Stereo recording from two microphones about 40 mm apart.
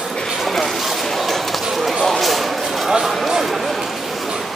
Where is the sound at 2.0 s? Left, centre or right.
Centre.